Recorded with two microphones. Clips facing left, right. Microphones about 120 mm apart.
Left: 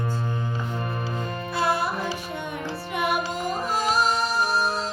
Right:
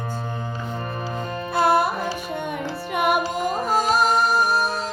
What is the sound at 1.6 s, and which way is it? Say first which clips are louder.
Music: right 6 dB; 55° right (ahead or behind).